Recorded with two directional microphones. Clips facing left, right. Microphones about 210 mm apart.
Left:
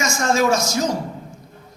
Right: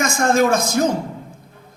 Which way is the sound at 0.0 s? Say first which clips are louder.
Right 3 dB; 55° right (ahead or behind).